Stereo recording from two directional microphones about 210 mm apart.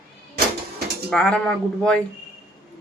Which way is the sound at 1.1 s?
5° left (ahead or behind).